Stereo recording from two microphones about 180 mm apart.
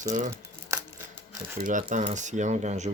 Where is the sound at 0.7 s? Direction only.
15° right (ahead or behind).